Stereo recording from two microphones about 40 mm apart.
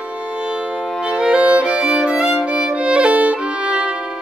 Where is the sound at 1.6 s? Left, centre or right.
Right.